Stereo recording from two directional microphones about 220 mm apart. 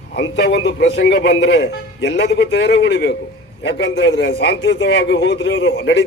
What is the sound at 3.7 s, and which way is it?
A man's voice, 50° left (ahead or behind).